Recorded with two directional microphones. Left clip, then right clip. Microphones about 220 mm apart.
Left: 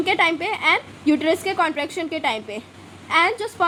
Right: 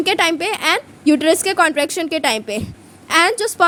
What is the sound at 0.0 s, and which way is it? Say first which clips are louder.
A woman's voice: right 3 dB; 45° right (ahead or behind).